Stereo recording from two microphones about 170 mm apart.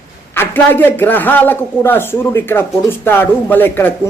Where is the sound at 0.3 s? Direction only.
10° left (ahead or behind).